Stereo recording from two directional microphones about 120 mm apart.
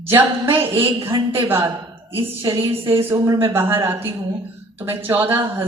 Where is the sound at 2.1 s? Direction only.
45° right (ahead or behind).